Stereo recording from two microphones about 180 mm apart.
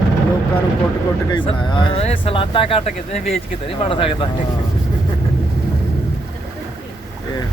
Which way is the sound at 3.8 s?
30° left (ahead or behind).